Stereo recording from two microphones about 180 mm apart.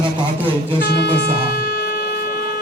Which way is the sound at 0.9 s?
65° left (ahead or behind).